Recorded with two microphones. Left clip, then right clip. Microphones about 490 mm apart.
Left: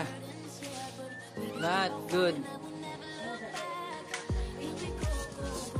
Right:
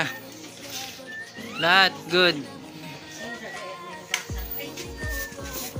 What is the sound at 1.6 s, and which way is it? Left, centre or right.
Speech, left.